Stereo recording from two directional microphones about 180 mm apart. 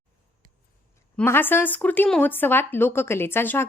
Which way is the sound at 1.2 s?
10° left (ahead or behind).